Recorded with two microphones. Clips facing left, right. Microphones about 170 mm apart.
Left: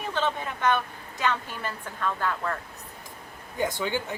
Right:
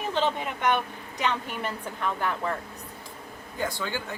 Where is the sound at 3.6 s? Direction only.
20° left (ahead or behind).